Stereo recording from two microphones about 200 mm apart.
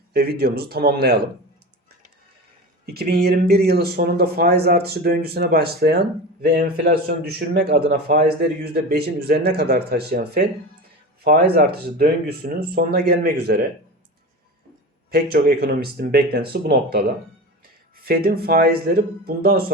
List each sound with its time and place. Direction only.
0.1 s speech: 50° right (ahead or behind)
2.8 s a man's voice: 50° right (ahead or behind)
15.1 s speech: 50° right (ahead or behind)
18.0 s speech: 50° right (ahead or behind)